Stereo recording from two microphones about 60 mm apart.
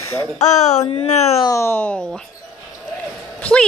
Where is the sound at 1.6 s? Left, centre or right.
Left.